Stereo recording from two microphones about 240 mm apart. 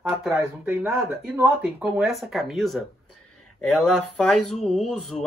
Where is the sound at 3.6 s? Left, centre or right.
Left.